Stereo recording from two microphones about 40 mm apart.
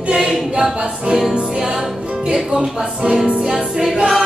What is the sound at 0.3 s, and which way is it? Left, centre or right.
A capella, centre.